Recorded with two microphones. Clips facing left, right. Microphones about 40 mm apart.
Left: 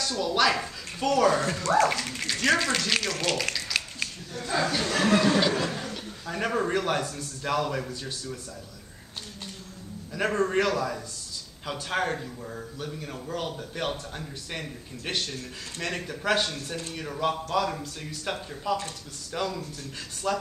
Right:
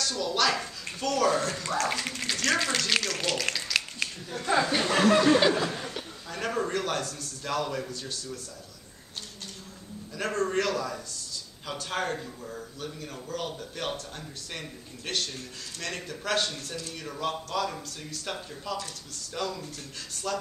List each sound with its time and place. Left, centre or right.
0.0 s a man's voice: centre
4.3 s speech: right
4.6 s speech: centre
5.0 s speech: centre
6.2 s a man's voice: centre
10.1 s a man's voice: centre